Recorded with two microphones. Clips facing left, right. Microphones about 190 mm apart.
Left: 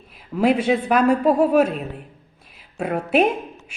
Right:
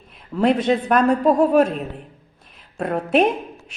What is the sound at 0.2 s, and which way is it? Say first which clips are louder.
A woman's voice: even; 10° left (ahead or behind).